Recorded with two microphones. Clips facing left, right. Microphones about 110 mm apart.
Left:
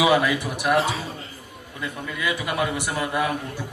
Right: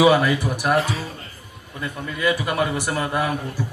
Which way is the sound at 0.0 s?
15° left (ahead or behind).